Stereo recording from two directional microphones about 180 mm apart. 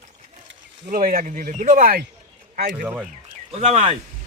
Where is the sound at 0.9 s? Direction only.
50° right (ahead or behind).